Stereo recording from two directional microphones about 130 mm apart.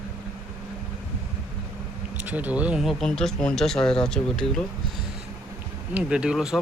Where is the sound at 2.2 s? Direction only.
10° right (ahead or behind); by 4.6 s 5° left (ahead or behind).